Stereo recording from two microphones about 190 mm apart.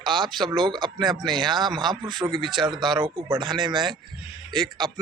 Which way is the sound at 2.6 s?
25° right (ahead or behind).